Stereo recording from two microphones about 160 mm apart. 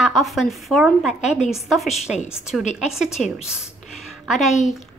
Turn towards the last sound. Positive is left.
turn(degrees=0)  # may be behind; listen again after turning